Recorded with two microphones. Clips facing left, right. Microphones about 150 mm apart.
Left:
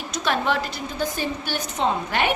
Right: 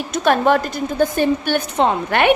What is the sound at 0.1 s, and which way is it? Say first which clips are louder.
A woman's voice: right 8 dB; 50° right (ahead or behind).